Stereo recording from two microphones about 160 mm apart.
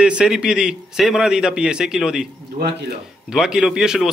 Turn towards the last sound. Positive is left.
turn(degrees=-5)  # may be behind; listen again after turning